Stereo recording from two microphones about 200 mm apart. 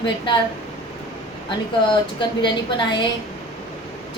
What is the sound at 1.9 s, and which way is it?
A woman's voice, 25° left (ahead or behind).